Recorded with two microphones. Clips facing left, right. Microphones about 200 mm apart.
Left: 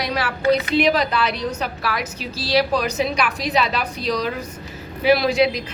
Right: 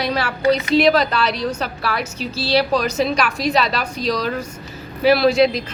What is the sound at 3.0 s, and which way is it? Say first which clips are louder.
Speech: right 3 dB; 15° left (ahead or behind).